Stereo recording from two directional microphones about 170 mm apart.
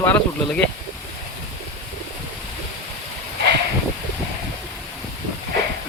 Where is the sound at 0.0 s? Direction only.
10° left (ahead or behind).